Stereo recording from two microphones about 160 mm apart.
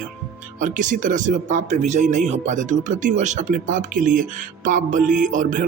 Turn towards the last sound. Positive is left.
turn(degrees=-55)  # may be behind; listen again after turning